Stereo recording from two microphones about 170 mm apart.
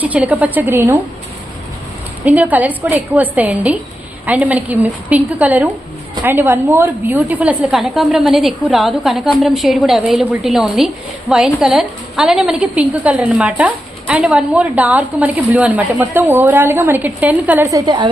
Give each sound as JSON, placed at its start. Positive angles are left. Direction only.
{"t": 0.0, "sound": "a woman's voice", "side_deg": -10}
{"t": 2.2, "sound": "a woman's voice", "side_deg": -10}